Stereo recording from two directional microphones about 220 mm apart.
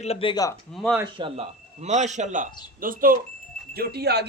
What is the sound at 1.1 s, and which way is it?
A man's voice, 25° right (ahead or behind).